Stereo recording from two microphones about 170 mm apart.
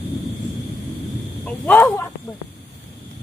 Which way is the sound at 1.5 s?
10° left (ahead or behind).